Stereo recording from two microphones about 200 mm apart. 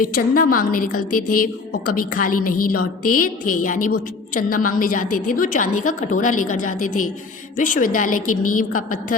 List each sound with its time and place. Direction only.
0.0 s a woman's voice: 45° left (ahead or behind)